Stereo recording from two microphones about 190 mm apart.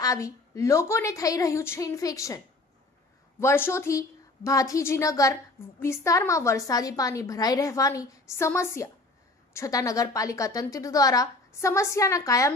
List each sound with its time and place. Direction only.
0.0 s a woman's voice: 15° left (ahead or behind)
3.4 s a woman's voice: 15° left (ahead or behind)